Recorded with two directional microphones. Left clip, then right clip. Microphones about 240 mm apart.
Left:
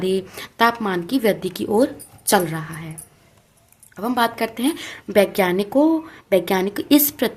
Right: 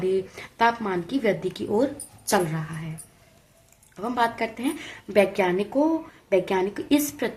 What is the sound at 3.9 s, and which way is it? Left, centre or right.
A woman's voice, left.